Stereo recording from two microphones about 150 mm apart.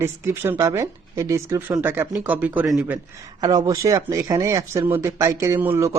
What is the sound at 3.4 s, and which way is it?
Speech, 25° right (ahead or behind).